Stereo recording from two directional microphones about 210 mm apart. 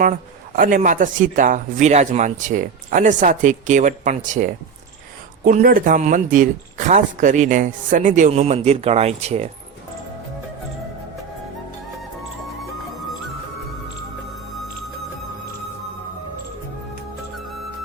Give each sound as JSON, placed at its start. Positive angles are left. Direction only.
{"t": 0.5, "sound": "speech", "side_deg": -40}